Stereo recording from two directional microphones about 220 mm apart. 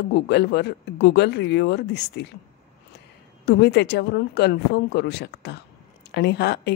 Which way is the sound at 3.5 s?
50° left (ahead or behind).